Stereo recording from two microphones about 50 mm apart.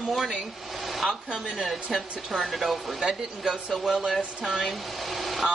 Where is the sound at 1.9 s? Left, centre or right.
Centre.